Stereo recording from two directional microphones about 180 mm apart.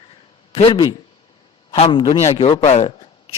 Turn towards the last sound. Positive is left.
turn(degrees=35)  # may be behind; listen again after turning